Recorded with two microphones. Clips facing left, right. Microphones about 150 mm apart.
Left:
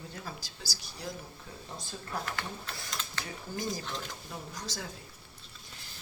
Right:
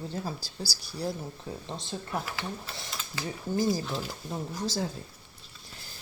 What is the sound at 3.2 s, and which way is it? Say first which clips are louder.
Speech: right 11 dB; 30° right (ahead or behind).